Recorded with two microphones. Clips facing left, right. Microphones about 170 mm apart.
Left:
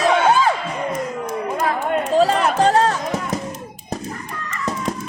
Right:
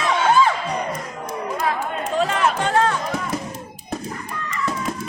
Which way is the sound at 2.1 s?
35° left (ahead or behind).